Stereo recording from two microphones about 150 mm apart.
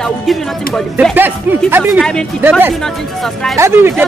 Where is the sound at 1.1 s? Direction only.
15° right (ahead or behind).